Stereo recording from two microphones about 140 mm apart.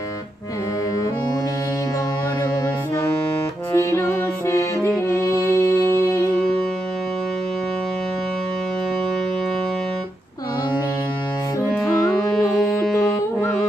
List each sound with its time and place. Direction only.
3.7 s music: 20° left (ahead or behind)
12.3 s carnatic music: 5° left (ahead or behind)